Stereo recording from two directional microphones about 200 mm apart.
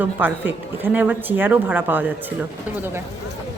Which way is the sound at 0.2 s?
10° right (ahead or behind).